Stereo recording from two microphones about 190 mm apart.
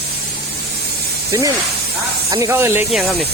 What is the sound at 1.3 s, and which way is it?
Speech, 15° right (ahead or behind).